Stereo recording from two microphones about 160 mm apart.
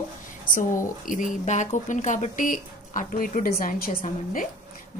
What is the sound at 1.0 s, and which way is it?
Speech, 55° left (ahead or behind).